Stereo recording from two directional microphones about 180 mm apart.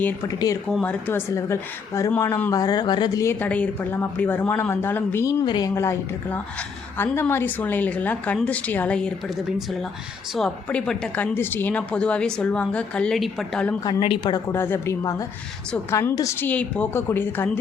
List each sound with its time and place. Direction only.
0.0 s a woman's voice: 15° left (ahead or behind)
0.7 s speech: 5° left (ahead or behind)
10.3 s speech: 5° left (ahead or behind)
13.8 s a woman's voice: 25° left (ahead or behind); by 17.6 s 10° left (ahead or behind)